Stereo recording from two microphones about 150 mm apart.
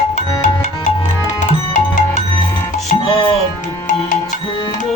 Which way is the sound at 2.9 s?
40° left (ahead or behind).